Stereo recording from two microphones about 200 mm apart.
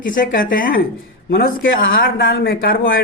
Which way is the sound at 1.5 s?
75° left (ahead or behind).